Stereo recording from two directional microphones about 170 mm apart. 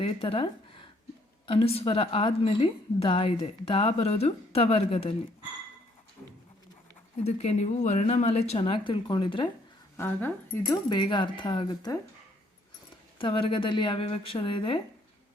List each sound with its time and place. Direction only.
0.0 s a woman's voice: 30° left (ahead or behind)
7.3 s a woman's voice: 40° left (ahead or behind)
10.0 s speech: 10° left (ahead or behind)
13.1 s speech: 30° left (ahead or behind)